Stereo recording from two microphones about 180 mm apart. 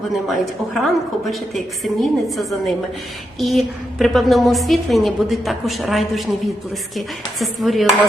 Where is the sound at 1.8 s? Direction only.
Centre (ahead or behind).